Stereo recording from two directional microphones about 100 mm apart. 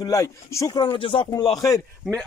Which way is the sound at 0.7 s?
60° left (ahead or behind).